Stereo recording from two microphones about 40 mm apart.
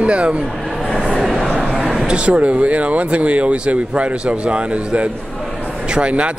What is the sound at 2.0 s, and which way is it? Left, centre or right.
Speech, right.